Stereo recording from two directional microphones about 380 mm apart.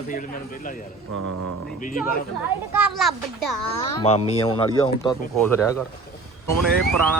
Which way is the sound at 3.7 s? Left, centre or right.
Centre.